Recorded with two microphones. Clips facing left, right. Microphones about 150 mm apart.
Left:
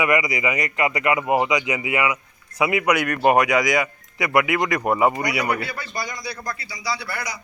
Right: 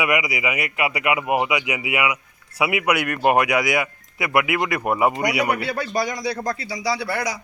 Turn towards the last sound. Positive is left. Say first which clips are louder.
# right 5 dB
turn(degrees=-90)